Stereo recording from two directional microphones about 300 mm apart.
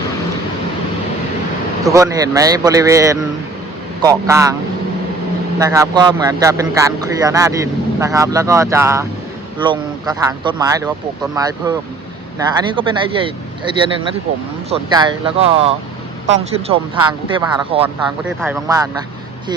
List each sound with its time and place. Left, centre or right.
1.8 s speech: centre
5.5 s speech: centre
17.8 s speech: centre